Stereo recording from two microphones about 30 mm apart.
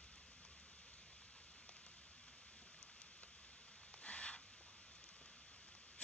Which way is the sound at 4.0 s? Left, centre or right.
Left.